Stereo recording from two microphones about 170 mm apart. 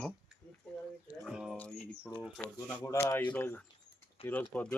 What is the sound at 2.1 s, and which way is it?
Speech, 10° left (ahead or behind).